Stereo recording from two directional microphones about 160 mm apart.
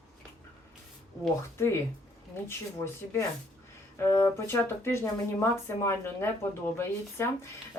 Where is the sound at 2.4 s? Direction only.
15° left (ahead or behind).